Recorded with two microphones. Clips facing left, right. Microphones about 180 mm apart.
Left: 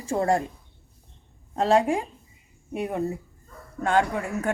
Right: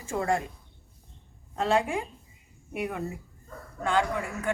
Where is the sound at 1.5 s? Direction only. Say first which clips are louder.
Left 5 dB; 35° left (ahead or behind).